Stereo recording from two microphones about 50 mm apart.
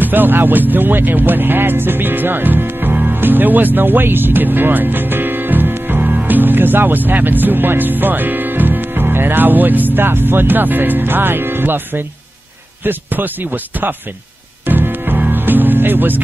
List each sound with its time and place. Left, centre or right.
0.0 s music: right
12.8 s a man's voice: right
14.7 s music: right